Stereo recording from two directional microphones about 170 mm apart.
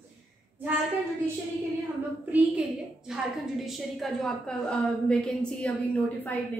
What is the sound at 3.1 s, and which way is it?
A woman's voice, centre (ahead or behind).